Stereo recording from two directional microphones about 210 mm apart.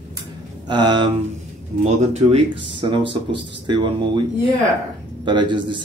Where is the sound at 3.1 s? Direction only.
20° right (ahead or behind).